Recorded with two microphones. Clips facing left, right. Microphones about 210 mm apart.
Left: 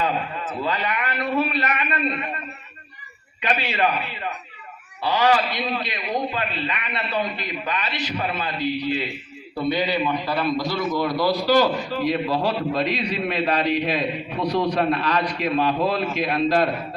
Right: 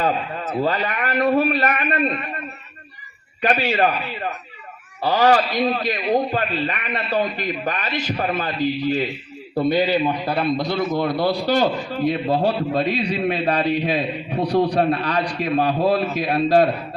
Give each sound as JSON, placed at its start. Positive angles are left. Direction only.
{"t": 0.6, "sound": "a man's voice", "side_deg": -45}
{"t": 3.4, "sound": "a man's voice", "side_deg": -45}
{"t": 12.2, "sound": "a man's voice", "side_deg": -40}